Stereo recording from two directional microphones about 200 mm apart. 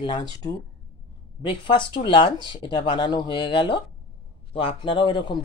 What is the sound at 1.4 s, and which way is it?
Speech, 25° left (ahead or behind).